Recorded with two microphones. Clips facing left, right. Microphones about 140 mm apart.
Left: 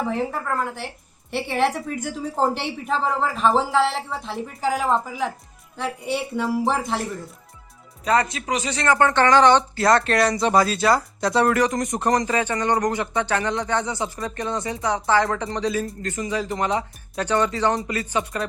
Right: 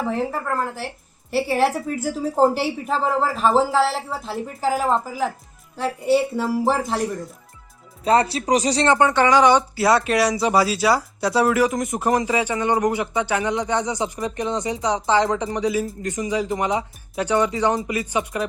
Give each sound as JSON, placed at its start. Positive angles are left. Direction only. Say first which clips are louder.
{"t": 0.1, "sound": "speech", "louder": "right 1 dB", "side_deg": 0}
{"t": 6.3, "sound": "speech", "louder": "right 2 dB", "side_deg": 0}
{"t": 8.0, "sound": "speech", "louder": "right 3 dB", "side_deg": -30}
{"t": 9.0, "sound": "speech", "louder": "left 3 dB", "side_deg": -10}